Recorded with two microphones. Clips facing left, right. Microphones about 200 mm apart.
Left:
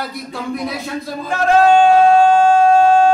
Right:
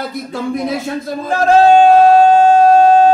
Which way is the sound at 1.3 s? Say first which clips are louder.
Right 3 dB; 35° right (ahead or behind).